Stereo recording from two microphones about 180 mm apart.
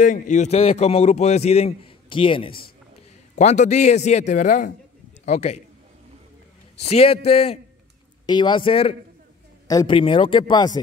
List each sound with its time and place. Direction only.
0.0 s a man's voice: 45° left (ahead or behind); by 2.5 s 30° left (ahead or behind)
3.3 s a man's voice: 40° left (ahead or behind)
6.9 s a man's voice: 35° left (ahead or behind)